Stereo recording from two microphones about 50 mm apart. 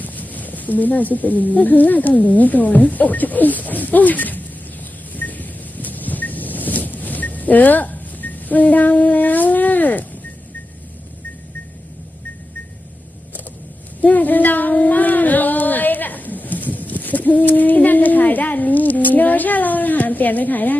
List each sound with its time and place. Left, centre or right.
0.0 s speech: left
5.1 s vehicle: left
14.0 s speech: left